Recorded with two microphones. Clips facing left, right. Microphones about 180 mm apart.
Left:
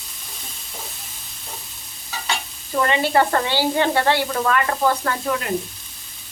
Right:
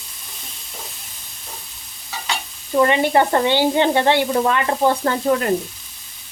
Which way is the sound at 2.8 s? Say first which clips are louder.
Right 2 dB; 20° right (ahead or behind).